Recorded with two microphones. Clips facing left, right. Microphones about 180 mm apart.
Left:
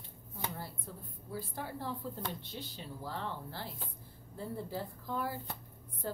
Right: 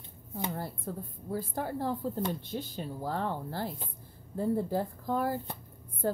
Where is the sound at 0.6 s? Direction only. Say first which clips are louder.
Right 8 dB; 50° right (ahead or behind).